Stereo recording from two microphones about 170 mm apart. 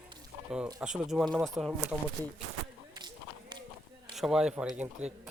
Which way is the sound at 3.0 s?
25° right (ahead or behind).